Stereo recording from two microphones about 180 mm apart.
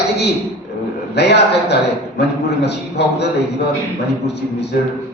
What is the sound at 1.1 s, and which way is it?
A man's voice, 65° left (ahead or behind).